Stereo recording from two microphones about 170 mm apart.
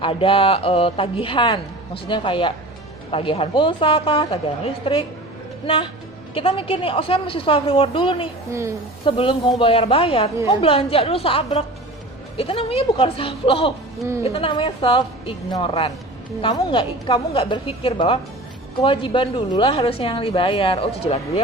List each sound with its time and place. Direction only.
0.0 s a woman's voice: 30° left (ahead or behind)
14.0 s a woman's voice: 15° right (ahead or behind)
14.3 s a woman's voice: 30° left (ahead or behind)